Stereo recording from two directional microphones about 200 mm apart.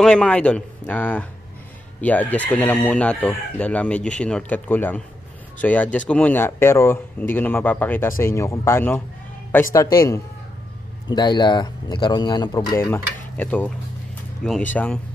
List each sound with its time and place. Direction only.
0.0 s speech: 5° left (ahead or behind)
14.7 s speech: 5° left (ahead or behind)